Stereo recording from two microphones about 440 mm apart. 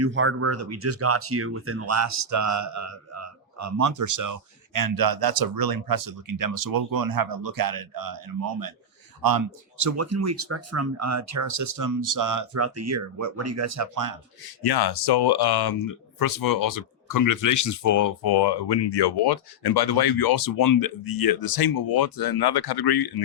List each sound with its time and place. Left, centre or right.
0.0 s speech: right
14.4 s speech: left